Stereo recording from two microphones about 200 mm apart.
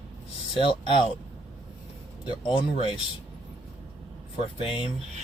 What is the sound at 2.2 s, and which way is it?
Speech, 25° left (ahead or behind).